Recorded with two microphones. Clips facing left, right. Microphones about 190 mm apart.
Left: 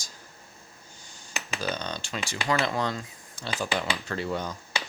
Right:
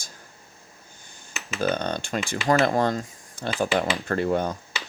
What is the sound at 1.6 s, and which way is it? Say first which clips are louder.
Speech: right 9 dB; 55° right (ahead or behind).